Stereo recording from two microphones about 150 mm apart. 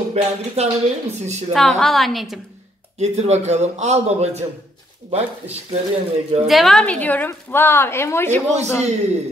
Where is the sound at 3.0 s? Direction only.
50° right (ahead or behind).